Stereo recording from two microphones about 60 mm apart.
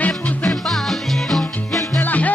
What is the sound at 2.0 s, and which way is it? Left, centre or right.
Music, left.